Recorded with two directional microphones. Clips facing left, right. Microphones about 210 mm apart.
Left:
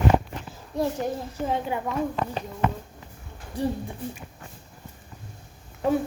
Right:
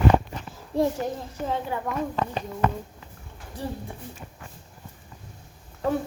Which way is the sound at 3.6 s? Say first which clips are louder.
Left 7 dB; 15° left (ahead or behind).